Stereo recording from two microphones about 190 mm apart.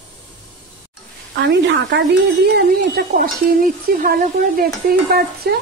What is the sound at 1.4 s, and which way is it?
A woman's voice, 65° right (ahead or behind).